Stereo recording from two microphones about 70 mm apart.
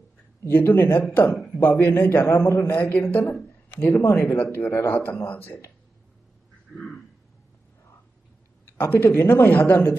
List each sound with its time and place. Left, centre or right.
0.4 s speech: left
1.5 s speech: left
2.7 s a man's voice: left
8.7 s speech: left